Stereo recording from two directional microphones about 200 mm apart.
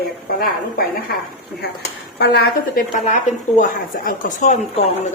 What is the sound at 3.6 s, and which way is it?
A woman's voice, 40° left (ahead or behind).